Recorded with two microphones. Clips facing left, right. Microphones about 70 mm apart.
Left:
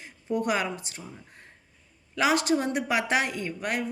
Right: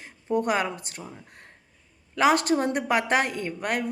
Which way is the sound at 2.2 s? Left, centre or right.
Right.